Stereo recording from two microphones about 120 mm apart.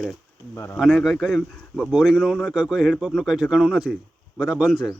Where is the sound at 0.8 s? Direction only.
5° right (ahead or behind).